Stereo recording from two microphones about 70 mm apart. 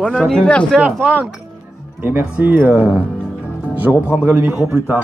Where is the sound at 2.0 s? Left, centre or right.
Right.